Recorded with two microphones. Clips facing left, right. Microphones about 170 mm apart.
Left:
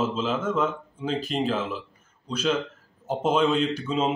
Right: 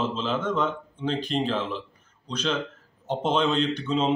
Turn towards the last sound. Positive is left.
turn(degrees=5)  # may be behind; listen again after turning